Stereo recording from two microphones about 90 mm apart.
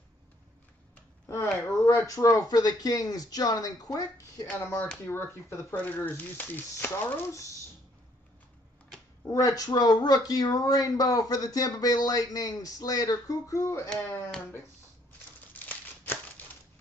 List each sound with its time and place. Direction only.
1.3 s speech: 30° left (ahead or behind)
4.6 s speech: 30° left (ahead or behind)
9.3 s speech: 40° left (ahead or behind)
15.5 s a sound: 20° left (ahead or behind)